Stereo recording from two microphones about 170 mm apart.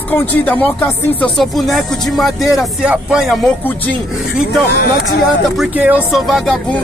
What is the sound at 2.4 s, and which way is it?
Speech, 20° left (ahead or behind).